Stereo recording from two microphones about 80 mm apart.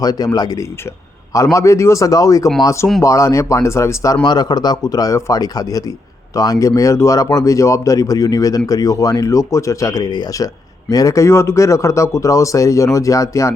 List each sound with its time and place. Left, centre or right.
0.0 s speech: left
1.5 s speech: left
4.2 s speech: left
10.9 s speech: left